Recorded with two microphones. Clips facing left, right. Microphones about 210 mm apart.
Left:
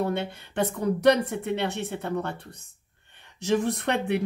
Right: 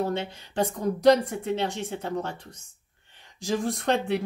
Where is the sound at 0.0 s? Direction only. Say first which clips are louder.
Left 1 dB; 60° left (ahead or behind).